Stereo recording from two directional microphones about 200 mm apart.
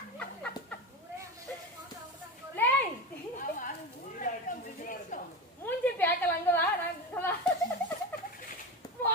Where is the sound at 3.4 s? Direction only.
40° left (ahead or behind).